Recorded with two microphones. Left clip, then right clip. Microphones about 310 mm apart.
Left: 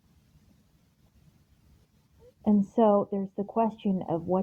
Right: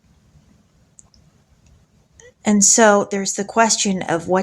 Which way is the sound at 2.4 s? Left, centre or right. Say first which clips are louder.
Right 11 dB; left.